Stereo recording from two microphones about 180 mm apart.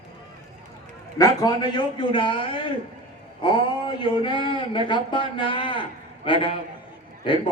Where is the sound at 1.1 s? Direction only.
20° left (ahead or behind).